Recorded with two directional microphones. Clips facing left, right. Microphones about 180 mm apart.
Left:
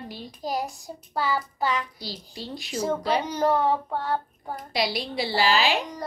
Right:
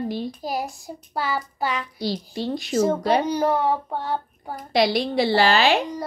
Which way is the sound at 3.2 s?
10° right (ahead or behind).